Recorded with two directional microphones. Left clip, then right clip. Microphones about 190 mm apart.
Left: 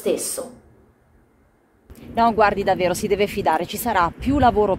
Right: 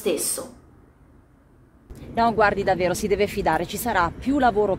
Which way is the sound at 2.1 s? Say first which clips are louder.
Left 2 dB; 10° left (ahead or behind).